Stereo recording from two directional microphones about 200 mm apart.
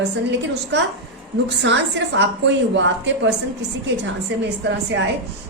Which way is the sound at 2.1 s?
60° right (ahead or behind).